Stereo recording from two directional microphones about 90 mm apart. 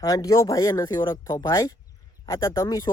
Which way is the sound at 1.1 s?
30° left (ahead or behind).